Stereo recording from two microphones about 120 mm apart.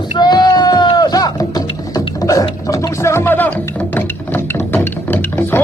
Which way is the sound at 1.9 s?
30° left (ahead or behind).